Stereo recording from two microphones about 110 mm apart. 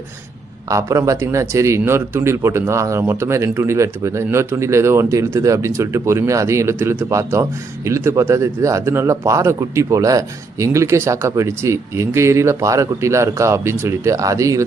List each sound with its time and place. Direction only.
0.7 s speech: 30° right (ahead or behind)